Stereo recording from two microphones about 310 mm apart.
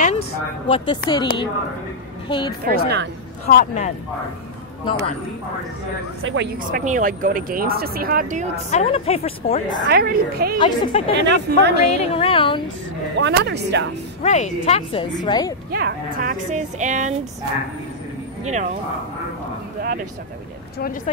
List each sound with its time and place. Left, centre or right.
0.0 s a woman's voice: centre
2.6 s speech: right
3.4 s a woman's voice: left
6.2 s speech: right
8.6 s a woman's voice: left
9.8 s speech: right
10.6 s a woman's voice: centre
11.2 s speech: right
12.0 s a woman's voice: centre
13.2 s speech: right
14.2 s a woman's voice: left
15.7 s speech: right
18.4 s speech: right